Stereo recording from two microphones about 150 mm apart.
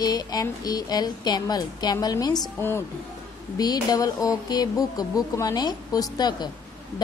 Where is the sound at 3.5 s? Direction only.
25° left (ahead or behind).